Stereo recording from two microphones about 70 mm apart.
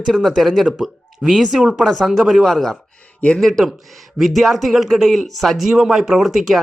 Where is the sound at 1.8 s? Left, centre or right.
Centre.